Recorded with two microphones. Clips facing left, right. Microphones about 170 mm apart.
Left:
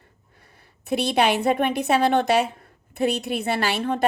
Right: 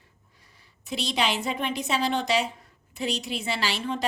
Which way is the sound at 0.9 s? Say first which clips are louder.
Left 7 dB; 55° left (ahead or behind).